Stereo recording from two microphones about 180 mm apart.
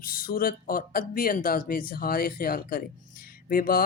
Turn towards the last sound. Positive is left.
turn(degrees=55)  # may be behind; listen again after turning